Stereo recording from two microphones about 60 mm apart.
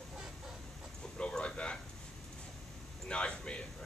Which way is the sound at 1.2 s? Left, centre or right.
Centre.